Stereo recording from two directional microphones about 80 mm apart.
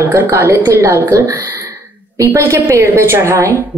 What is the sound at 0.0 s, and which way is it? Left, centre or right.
A woman's voice, right.